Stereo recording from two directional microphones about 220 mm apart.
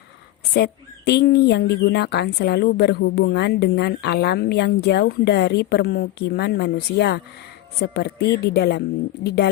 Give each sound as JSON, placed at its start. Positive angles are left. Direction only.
{"t": 0.5, "sound": "speech", "side_deg": 50}